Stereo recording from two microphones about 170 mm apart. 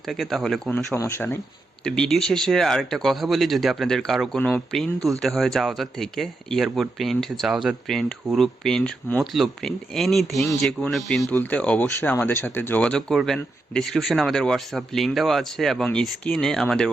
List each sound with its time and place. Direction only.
0.1 s speech: centre (ahead or behind)
0.9 s speech: 15° left (ahead or behind)
1.8 s speech: 5° left (ahead or behind)